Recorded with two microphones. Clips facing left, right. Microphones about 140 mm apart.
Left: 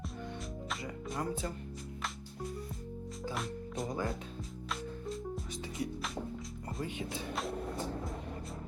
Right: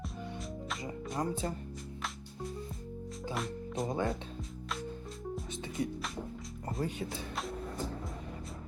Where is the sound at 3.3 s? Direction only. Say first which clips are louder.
Right 4 dB; centre (ahead or behind).